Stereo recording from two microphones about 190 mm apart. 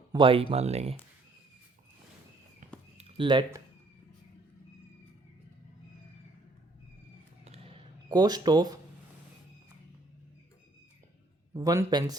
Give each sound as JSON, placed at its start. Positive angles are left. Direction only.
{"t": 0.1, "sound": "speech", "side_deg": -30}
{"t": 3.0, "sound": "speech", "side_deg": -30}
{"t": 8.1, "sound": "speech", "side_deg": -20}
{"t": 11.5, "sound": "speech", "side_deg": -15}